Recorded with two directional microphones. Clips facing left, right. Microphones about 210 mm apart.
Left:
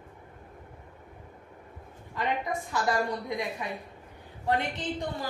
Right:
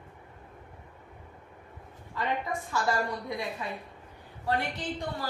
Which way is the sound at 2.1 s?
20° left (ahead or behind).